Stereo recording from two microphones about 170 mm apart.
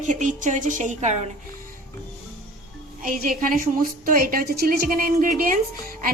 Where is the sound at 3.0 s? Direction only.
55° right (ahead or behind).